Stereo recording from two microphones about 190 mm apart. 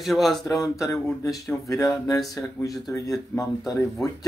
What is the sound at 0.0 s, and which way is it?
Speech, centre (ahead or behind).